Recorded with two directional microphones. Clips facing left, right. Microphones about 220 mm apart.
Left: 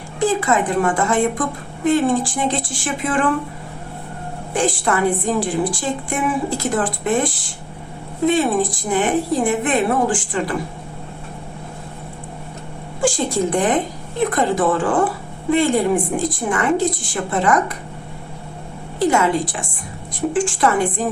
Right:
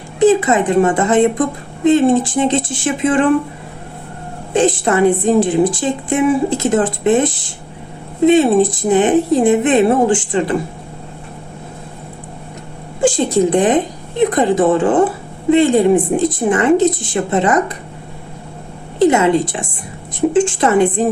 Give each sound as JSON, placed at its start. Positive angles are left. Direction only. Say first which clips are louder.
{"t": 0.2, "sound": "a woman's voice", "louder": "right 7 dB", "side_deg": -20}
{"t": 4.5, "sound": "a woman's voice", "louder": "right 6 dB", "side_deg": -20}
{"t": 13.0, "sound": "a woman's voice", "louder": "right 6 dB", "side_deg": -20}
{"t": 18.9, "sound": "a woman's voice", "louder": "right 5 dB", "side_deg": -20}